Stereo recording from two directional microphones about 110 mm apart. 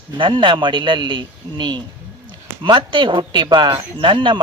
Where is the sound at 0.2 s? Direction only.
45° right (ahead or behind).